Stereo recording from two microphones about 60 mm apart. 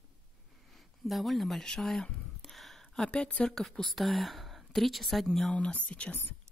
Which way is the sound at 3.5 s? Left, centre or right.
Centre.